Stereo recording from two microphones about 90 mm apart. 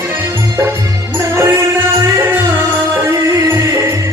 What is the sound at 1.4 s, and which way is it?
Music, 30° right (ahead or behind).